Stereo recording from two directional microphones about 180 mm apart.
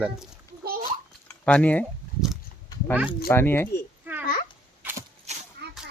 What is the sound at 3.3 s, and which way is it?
Speech, 15° left (ahead or behind).